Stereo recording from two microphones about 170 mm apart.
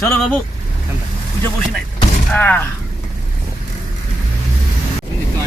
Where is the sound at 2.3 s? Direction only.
10° left (ahead or behind).